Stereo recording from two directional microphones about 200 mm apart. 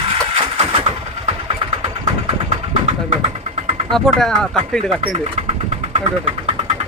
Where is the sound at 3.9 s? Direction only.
Centre (ahead or behind).